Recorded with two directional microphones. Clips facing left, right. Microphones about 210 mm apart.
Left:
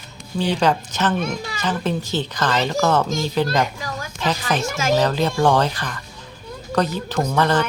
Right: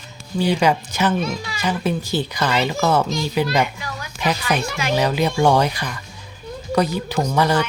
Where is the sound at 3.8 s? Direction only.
45° left (ahead or behind).